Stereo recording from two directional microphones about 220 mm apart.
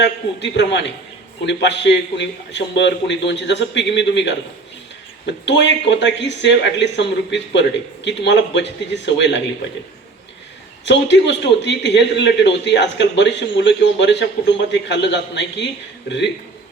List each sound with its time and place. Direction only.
0.0 s a man's voice: 55° left (ahead or behind)
10.8 s a man's voice: 55° left (ahead or behind)